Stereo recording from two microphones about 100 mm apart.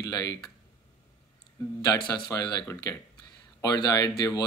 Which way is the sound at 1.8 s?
40° left (ahead or behind).